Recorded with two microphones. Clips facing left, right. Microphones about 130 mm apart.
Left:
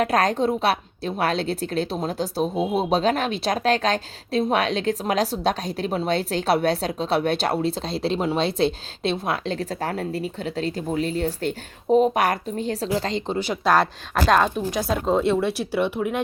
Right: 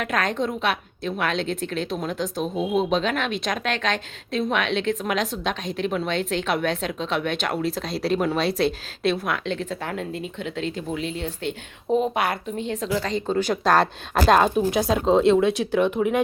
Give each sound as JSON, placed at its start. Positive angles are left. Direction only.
{"t": 0.0, "sound": "a woman's voice", "side_deg": 35}
{"t": 13.2, "sound": "speech", "side_deg": 10}
{"t": 14.3, "sound": "speech", "side_deg": -5}